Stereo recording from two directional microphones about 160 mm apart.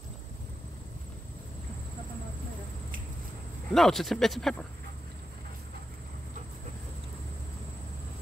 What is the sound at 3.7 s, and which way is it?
Speech, centre (ahead or behind).